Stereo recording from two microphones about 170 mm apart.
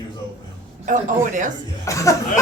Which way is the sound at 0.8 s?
50° right (ahead or behind).